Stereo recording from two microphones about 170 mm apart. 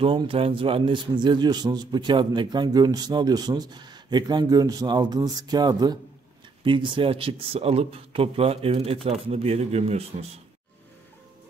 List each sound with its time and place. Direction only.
0.0 s a man's voice: 35° right (ahead or behind)